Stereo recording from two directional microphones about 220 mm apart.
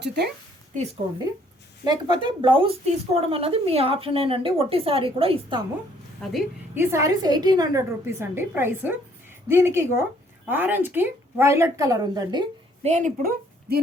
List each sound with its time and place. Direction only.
0.0 s a woman's voice: 50° right (ahead or behind)
1.8 s a woman's voice: 20° right (ahead or behind)
6.2 s a woman's voice: 5° left (ahead or behind)
6.7 s speech: 10° right (ahead or behind)
12.9 s speech: 35° right (ahead or behind)